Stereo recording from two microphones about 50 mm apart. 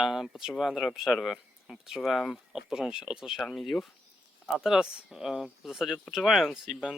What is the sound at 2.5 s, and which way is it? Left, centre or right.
Speech, centre.